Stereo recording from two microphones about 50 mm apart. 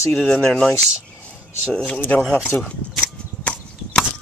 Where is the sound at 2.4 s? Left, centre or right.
Left.